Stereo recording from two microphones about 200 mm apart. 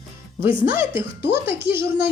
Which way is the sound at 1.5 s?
10° right (ahead or behind).